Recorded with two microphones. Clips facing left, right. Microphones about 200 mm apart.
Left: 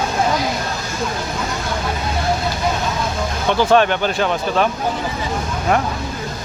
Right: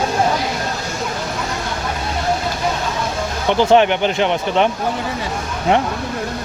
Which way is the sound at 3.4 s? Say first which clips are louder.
Right 2 dB; 20° right (ahead or behind).